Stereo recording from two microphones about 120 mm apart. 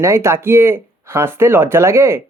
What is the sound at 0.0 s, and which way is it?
Speech, 25° right (ahead or behind).